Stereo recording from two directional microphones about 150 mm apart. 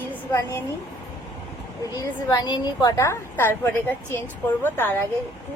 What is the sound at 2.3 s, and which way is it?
A woman's voice, 30° left (ahead or behind).